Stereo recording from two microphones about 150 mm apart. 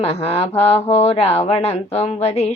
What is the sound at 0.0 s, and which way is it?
A woman's voice, 40° left (ahead or behind).